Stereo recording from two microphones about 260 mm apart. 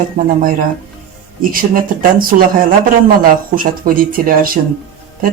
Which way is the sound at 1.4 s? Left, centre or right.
Right.